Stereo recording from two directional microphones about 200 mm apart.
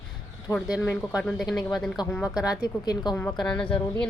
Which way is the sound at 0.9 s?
Centre (ahead or behind).